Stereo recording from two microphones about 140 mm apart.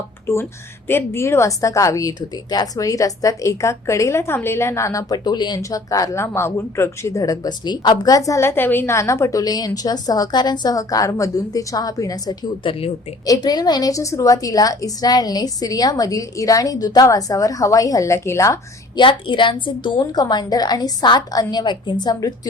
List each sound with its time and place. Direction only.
0.3 s speech: 15° left (ahead or behind)
18.9 s a woman's voice: 35° left (ahead or behind)